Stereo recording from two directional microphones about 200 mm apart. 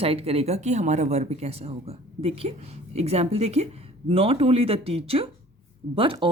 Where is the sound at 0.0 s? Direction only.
30° right (ahead or behind).